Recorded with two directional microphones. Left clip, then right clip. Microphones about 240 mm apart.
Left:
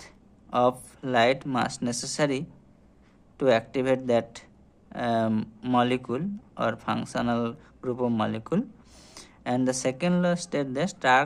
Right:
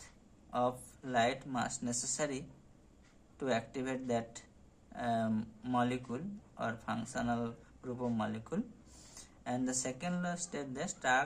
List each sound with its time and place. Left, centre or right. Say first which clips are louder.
0.5 s speech: left 11 dB; left